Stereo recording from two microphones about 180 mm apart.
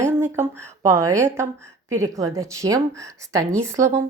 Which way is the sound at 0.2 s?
15° right (ahead or behind).